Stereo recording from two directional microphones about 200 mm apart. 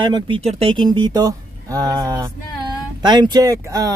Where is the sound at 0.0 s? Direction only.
25° right (ahead or behind).